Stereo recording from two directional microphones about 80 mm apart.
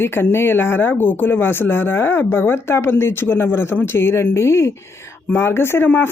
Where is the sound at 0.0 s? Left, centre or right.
Left.